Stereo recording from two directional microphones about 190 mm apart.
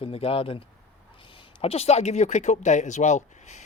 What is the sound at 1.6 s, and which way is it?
Speech, 30° left (ahead or behind).